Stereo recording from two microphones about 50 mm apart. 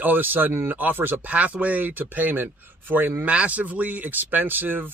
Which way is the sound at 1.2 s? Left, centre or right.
Right.